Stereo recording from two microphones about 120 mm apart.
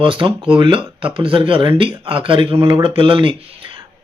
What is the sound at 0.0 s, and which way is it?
Speech, 45° right (ahead or behind).